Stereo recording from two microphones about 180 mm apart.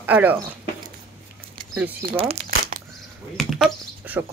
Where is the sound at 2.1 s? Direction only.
35° right (ahead or behind).